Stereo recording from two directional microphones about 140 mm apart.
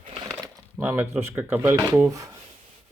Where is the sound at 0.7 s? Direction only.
15° right (ahead or behind).